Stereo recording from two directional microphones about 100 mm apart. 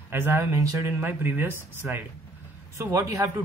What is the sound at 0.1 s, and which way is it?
Speech, 25° right (ahead or behind).